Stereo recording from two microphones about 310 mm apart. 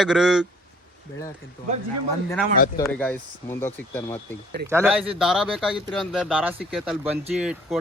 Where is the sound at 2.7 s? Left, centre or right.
Centre.